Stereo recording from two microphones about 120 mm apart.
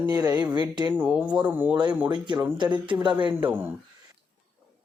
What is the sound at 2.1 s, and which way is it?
Speech, 40° right (ahead or behind).